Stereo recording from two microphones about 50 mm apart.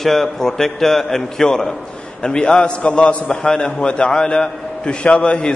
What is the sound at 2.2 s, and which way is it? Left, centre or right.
A man's voice, left.